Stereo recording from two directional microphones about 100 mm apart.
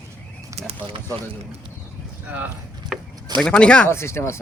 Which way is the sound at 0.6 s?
90° right.